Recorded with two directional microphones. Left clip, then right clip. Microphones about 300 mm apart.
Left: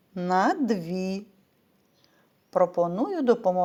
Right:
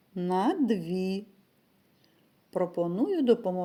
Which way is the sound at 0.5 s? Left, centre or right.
Centre.